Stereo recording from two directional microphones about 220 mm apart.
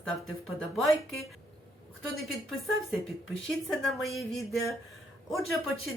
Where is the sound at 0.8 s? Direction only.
Centre (ahead or behind).